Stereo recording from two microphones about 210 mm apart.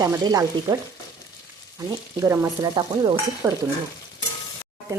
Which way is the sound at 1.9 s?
15° right (ahead or behind).